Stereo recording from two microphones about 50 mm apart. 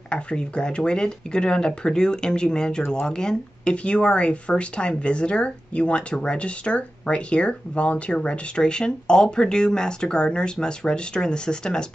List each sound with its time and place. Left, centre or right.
0.1 s speech: left